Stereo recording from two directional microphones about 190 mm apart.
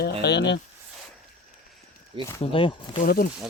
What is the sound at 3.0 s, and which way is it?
Speech, 50° left (ahead or behind).